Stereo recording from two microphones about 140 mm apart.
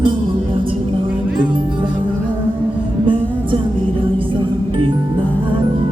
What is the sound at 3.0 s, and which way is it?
Music, 35° right (ahead or behind).